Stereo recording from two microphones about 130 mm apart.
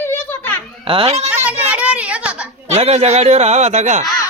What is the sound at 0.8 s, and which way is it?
Speech, 45° right (ahead or behind).